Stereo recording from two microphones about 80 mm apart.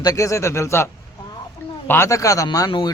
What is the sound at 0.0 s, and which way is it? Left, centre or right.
Speech, left.